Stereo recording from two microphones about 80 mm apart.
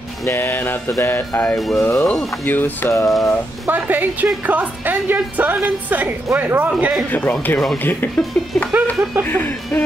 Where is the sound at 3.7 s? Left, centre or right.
Right.